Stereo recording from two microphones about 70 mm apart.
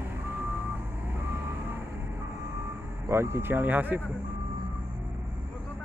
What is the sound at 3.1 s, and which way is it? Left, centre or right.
Speech, right.